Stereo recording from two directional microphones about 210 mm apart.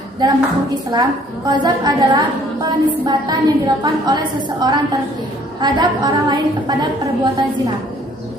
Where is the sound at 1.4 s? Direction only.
20° right (ahead or behind).